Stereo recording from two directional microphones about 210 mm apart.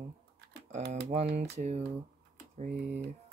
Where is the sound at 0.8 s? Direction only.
50° right (ahead or behind).